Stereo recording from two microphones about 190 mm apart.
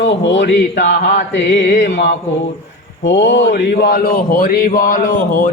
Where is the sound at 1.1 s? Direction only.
70° left (ahead or behind).